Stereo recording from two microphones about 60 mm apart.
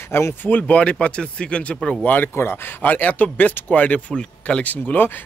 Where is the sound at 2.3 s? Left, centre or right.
Left.